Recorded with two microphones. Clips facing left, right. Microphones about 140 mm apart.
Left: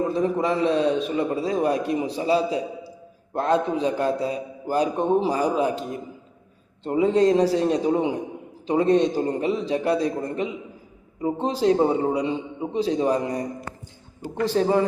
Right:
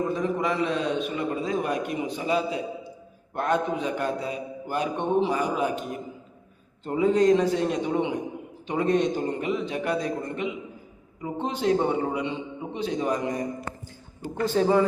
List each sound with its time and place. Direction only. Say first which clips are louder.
0.1 s a man's voice: left 4 dB; 35° left (ahead or behind)
14.4 s a man's voice: left 1 dB; 40° left (ahead or behind)